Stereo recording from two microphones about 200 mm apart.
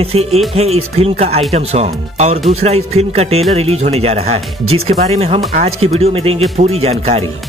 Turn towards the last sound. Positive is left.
turn(degrees=-30)  # may be behind; listen again after turning